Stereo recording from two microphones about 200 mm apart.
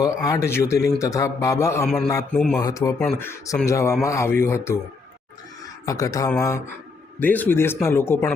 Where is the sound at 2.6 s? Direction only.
15° left (ahead or behind).